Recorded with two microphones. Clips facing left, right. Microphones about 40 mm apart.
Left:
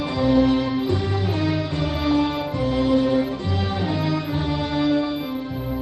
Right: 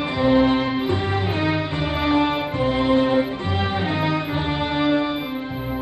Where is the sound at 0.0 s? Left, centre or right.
Right.